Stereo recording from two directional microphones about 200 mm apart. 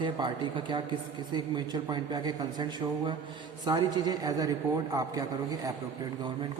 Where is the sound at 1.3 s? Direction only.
20° right (ahead or behind).